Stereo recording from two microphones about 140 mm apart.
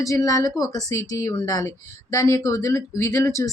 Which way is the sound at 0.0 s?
25° left (ahead or behind).